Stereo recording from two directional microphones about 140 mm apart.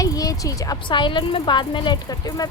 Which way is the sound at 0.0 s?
25° left (ahead or behind).